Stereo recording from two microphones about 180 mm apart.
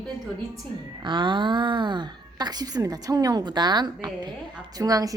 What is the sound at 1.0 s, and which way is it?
A woman's voice, 25° right (ahead or behind).